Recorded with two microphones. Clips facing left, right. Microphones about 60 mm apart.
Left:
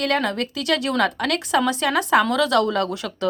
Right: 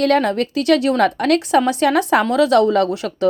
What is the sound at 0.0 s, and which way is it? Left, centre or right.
Speech, right.